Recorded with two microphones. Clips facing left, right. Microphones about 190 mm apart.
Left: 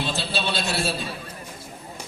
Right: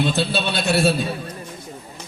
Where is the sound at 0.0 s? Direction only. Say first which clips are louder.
Right 6 dB; 55° right (ahead or behind).